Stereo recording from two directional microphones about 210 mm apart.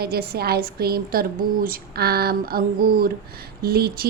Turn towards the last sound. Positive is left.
turn(degrees=-50)  # may be behind; listen again after turning